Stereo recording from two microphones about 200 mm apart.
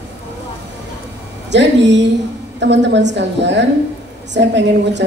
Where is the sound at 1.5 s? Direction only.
60° right (ahead or behind).